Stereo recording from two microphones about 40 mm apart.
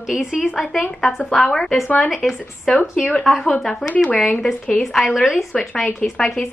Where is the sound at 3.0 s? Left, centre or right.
Left.